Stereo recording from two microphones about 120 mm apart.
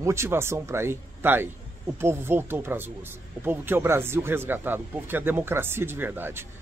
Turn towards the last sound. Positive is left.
turn(degrees=-20)  # may be behind; listen again after turning